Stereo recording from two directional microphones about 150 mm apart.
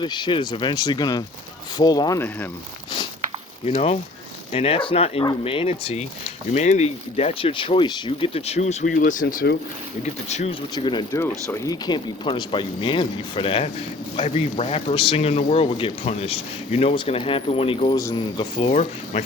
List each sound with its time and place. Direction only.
0.0 s speech: 30° left (ahead or behind); by 2.5 s 15° left (ahead or behind)
3.7 s speech: 45° left (ahead or behind); by 9.6 s 80° left
10.0 s speech: 50° left (ahead or behind)
10.5 s speech: 30° left (ahead or behind)
11.1 s speech: 15° left (ahead or behind); by 17.9 s 40° left (ahead or behind)
17.9 s speech: 25° left (ahead or behind)
18.7 s speech: 50° left (ahead or behind)